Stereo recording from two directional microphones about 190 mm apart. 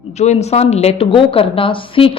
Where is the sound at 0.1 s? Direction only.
35° left (ahead or behind).